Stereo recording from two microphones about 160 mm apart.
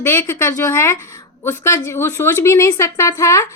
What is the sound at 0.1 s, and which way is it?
Speech, 20° left (ahead or behind).